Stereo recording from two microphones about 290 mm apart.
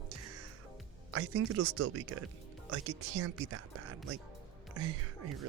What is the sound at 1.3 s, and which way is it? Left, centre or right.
Speech, right.